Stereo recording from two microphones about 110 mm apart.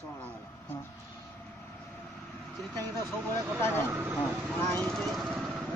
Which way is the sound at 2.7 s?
35° right (ahead or behind).